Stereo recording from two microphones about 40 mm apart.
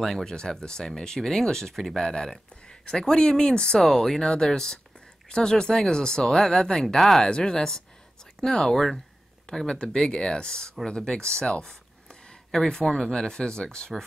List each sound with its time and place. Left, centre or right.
0.0 s speech: centre
2.0 s speech: centre
7.0 s speech: centre
7.2 s speech: left
9.7 s speech: left
11.6 s a sound: centre
12.4 s speech: centre